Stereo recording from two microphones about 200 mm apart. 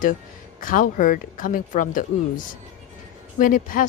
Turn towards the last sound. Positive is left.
turn(degrees=45)  # may be behind; listen again after turning